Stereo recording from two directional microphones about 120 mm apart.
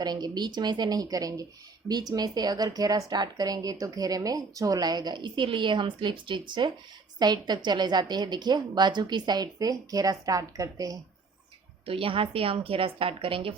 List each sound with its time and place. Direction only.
0.0 s a woman's voice: 35° right (ahead or behind)
11.9 s a woman's voice: 50° right (ahead or behind)